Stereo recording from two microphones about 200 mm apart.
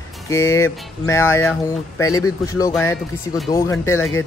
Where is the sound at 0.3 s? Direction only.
15° left (ahead or behind).